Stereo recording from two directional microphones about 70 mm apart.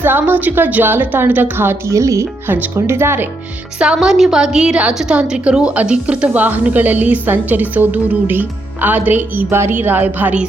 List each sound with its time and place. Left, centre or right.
0.0 s a woman's voice: right
1.9 s speech: right
2.7 s speech: right
3.8 s a woman's voice: centre; by 10.3 s right